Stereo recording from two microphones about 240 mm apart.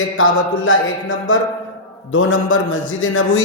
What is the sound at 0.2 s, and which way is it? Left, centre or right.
Speech, left.